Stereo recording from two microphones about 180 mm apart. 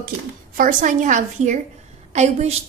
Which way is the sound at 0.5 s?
45° right (ahead or behind).